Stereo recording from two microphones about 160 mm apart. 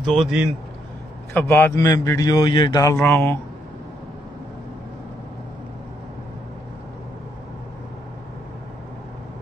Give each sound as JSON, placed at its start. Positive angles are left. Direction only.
{"t": 0.0, "sound": "a man's voice", "side_deg": 0}
{"t": 1.3, "sound": "a man's voice", "side_deg": 15}